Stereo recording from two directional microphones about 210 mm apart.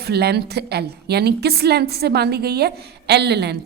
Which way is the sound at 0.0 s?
50° right (ahead or behind).